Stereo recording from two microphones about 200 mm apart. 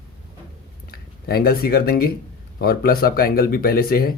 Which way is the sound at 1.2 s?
50° left (ahead or behind).